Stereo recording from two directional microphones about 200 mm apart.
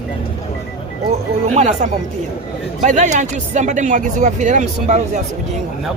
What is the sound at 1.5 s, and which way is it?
Speech, 35° right (ahead or behind).